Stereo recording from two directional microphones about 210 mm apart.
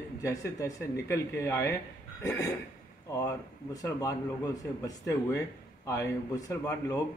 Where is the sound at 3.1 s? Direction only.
15° left (ahead or behind).